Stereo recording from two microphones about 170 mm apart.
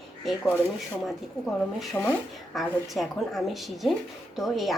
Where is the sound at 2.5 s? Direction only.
Centre (ahead or behind).